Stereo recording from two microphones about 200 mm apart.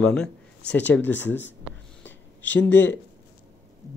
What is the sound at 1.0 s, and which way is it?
Speech, 65° left (ahead or behind).